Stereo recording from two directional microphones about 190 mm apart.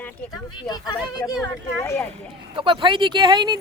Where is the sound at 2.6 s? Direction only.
30° right (ahead or behind).